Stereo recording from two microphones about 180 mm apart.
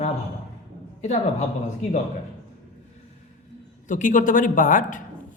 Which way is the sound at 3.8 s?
45° left (ahead or behind).